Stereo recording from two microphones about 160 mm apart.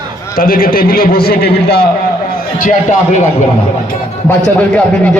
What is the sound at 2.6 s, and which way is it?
Speech, 50° left (ahead or behind).